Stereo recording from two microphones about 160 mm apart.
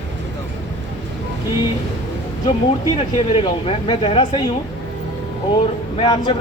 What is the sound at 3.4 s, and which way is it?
Speech, 30° left (ahead or behind).